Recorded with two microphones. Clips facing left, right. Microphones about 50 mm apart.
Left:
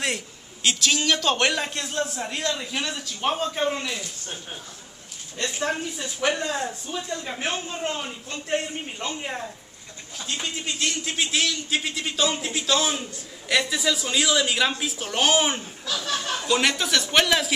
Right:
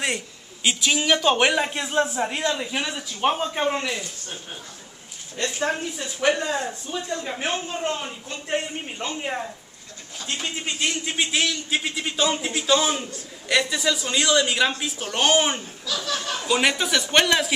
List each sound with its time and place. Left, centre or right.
0.7 s speech: centre
5.4 s speech: centre